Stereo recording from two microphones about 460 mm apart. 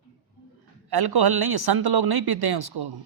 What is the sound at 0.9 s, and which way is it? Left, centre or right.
A man's voice, right.